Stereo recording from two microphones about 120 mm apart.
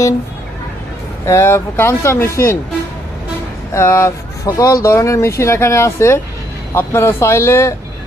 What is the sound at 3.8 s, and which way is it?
Speech, 25° left (ahead or behind).